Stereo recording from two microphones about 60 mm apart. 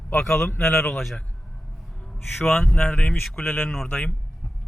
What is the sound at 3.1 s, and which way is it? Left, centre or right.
Speech, centre.